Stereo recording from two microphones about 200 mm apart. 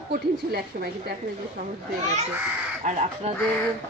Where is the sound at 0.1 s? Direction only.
50° right (ahead or behind).